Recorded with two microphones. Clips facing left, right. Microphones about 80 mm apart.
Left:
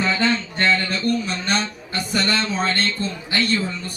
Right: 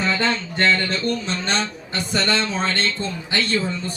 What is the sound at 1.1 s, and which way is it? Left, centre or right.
A man's voice, right.